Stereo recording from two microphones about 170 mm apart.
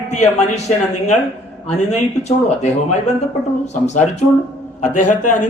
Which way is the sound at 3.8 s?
45° left (ahead or behind).